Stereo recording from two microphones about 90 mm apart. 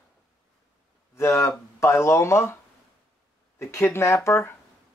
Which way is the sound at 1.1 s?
30° left (ahead or behind).